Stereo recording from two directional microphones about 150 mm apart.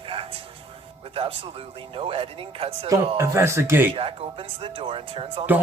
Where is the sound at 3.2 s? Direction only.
15° right (ahead or behind).